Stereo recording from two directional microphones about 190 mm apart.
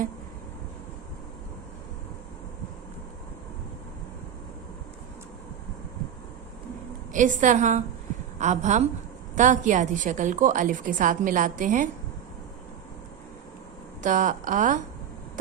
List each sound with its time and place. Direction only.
7.1 s a woman's voice: 40° right (ahead or behind)
14.0 s a woman's voice: 40° right (ahead or behind)